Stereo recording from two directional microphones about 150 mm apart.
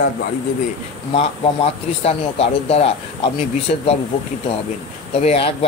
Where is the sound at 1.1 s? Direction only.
40° left (ahead or behind).